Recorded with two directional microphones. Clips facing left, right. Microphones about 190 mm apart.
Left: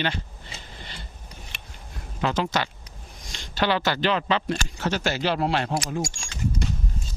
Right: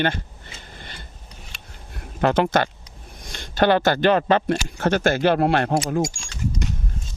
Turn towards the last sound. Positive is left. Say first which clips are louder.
# right 1 dB
turn(degrees=-20)  # may be behind; listen again after turning